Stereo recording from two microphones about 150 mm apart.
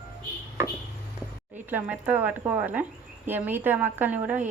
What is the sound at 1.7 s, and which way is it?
Speech, 10° right (ahead or behind).